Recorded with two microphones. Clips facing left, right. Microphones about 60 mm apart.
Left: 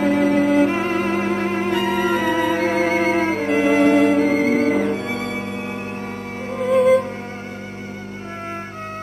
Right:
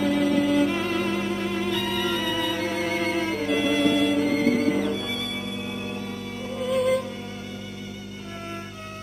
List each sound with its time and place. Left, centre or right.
0.0 s music: left
6.5 s music: left